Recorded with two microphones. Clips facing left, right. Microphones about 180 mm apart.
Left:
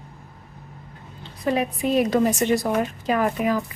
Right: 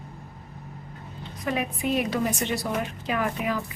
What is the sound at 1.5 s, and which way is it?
A woman's voice, 35° left (ahead or behind).